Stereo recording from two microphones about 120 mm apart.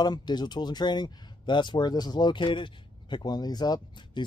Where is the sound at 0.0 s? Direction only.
35° left (ahead or behind).